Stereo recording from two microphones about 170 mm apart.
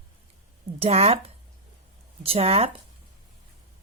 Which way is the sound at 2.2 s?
35° right (ahead or behind).